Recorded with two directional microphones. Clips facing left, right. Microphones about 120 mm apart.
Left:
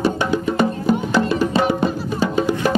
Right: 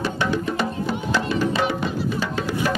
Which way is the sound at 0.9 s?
45° left (ahead or behind).